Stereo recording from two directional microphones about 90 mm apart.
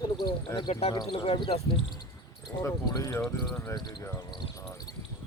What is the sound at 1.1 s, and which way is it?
Speech, 90° left.